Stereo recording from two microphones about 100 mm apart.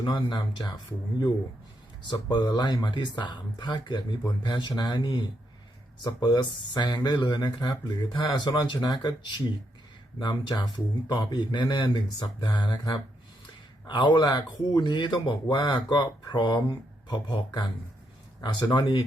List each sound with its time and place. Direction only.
0.0 s speech: 50° left (ahead or behind)
2.1 s speech: 45° left (ahead or behind)
18.3 s speech: 35° left (ahead or behind)
18.7 s speech: 50° left (ahead or behind)